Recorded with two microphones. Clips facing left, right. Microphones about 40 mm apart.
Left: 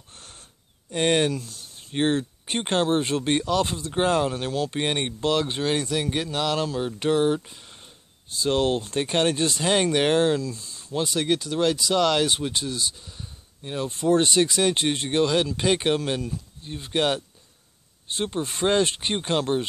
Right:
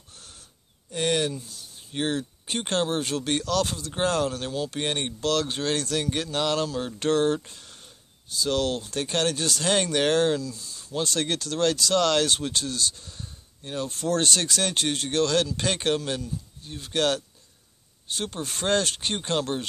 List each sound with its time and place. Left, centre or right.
0.1 s a sound: left
0.9 s speech: left; by 6.6 s centre
6.6 s speech: centre
8.4 s speech: left
10.4 s a sound: left
10.9 s speech: centre